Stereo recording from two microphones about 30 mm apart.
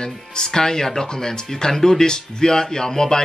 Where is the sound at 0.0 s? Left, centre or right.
Left.